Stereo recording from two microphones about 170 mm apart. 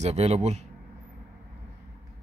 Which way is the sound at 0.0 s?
40° right (ahead or behind).